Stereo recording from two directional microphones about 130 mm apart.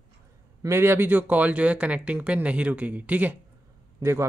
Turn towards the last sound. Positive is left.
turn(degrees=-20)  # may be behind; listen again after turning